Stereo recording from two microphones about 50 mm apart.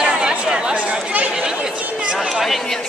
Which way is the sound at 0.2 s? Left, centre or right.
Centre.